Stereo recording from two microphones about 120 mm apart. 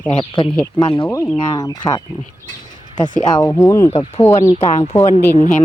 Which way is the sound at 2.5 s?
35° left (ahead or behind).